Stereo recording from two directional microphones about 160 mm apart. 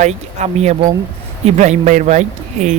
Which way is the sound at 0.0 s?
45° right (ahead or behind).